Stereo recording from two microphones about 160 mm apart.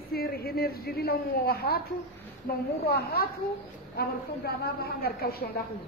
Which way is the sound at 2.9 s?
75° left (ahead or behind).